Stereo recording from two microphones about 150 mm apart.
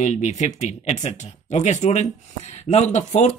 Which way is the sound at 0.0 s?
50° left (ahead or behind).